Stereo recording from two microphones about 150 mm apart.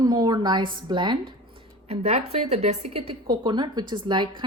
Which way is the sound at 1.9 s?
45° right (ahead or behind).